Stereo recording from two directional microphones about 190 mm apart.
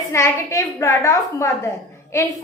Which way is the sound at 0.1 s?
15° left (ahead or behind).